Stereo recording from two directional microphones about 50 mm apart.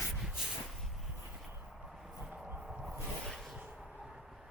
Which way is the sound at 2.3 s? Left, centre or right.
Right.